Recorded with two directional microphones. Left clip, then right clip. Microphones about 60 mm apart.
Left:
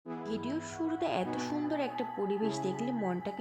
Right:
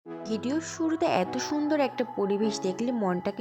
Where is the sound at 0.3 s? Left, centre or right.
Right.